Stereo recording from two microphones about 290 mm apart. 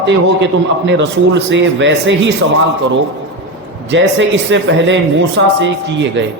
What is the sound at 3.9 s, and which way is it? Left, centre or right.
Speech, right.